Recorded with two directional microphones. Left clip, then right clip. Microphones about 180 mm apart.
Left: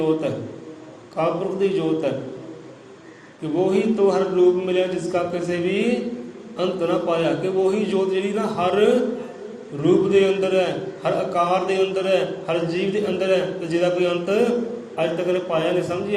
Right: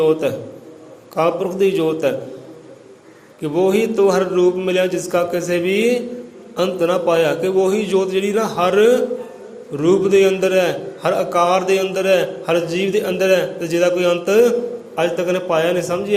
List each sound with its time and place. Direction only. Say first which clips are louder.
0.2 s a man's voice: right 5 dB; 60° right (ahead or behind)
3.4 s a man's voice: right 4 dB; 60° right (ahead or behind)